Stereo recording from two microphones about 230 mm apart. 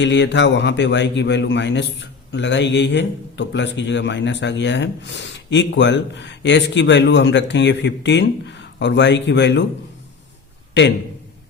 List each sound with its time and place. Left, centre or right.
0.0 s a man's voice: left